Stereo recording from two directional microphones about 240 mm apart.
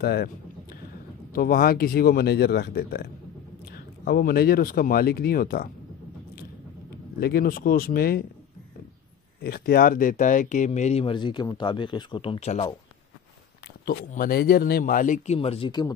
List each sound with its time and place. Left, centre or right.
0.0 s a sound: left
1.3 s speech: left
7.2 s speech: left
9.4 s speech: left
13.8 s speech: left; by 15.9 s centre